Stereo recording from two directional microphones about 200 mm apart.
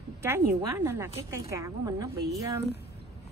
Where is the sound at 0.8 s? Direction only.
10° right (ahead or behind).